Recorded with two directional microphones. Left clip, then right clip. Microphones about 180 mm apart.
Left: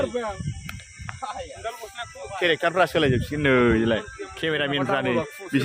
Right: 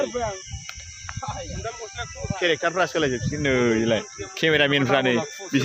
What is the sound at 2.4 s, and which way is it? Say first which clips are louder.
Speech: left 1 dB; 25° left (ahead or behind).